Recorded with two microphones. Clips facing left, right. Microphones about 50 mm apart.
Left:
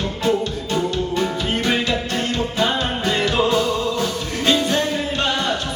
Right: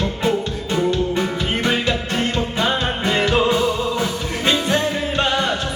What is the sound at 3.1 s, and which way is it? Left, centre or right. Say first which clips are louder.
Music: right 2 dB; centre.